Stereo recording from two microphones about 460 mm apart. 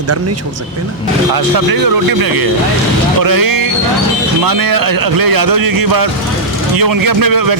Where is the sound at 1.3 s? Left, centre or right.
Right.